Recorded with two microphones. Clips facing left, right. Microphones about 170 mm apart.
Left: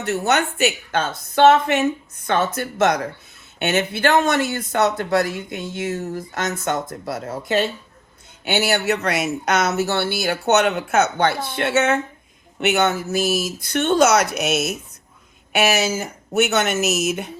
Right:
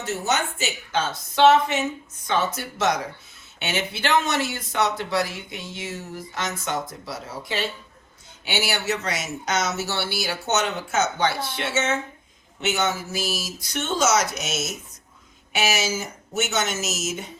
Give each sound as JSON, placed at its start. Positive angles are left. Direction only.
{"t": 0.0, "sound": "speech", "side_deg": 65}